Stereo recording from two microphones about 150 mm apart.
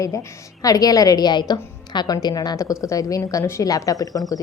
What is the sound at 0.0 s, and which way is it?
A woman's voice, 20° left (ahead or behind).